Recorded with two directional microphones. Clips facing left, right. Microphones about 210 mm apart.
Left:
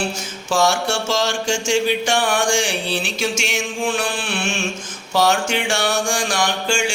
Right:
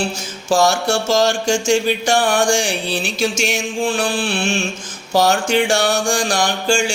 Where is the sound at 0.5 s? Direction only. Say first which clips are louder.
Right 3 dB; 40° right (ahead or behind).